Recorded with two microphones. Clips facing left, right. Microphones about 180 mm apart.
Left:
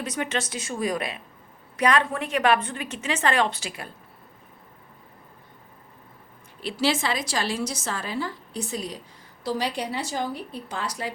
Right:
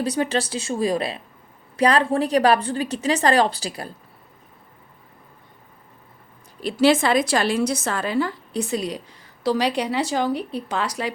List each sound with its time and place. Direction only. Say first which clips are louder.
0.0 s a woman's voice: right 6 dB; 35° right (ahead or behind)
6.6 s a woman's voice: right 7 dB; 45° right (ahead or behind); by 9.0 s 70° right (ahead or behind)
9.4 s a woman's voice: right 6 dB; 80° right